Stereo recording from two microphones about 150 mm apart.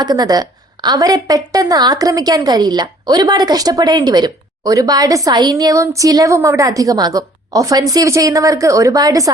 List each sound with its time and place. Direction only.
0.0 s a woman's voice: 25° right (ahead or behind)